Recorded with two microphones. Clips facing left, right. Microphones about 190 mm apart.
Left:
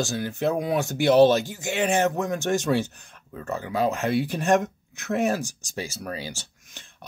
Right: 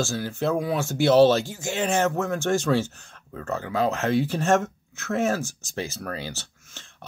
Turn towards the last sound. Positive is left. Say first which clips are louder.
# right 1 dB
turn(degrees=15)  # may be behind; listen again after turning